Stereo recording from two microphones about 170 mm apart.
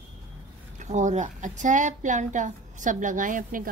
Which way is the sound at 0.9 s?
45° right (ahead or behind).